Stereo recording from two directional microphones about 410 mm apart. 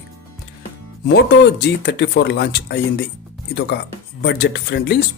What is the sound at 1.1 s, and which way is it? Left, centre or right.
Speech, left.